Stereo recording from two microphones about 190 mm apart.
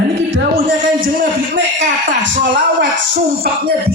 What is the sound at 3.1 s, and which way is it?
Speech, 50° right (ahead or behind).